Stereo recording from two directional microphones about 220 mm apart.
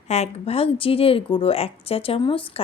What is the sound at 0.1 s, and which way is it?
A woman's voice, 30° left (ahead or behind).